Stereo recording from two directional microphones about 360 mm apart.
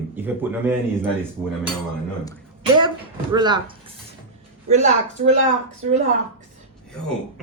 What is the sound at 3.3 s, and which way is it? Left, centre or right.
Speech, centre.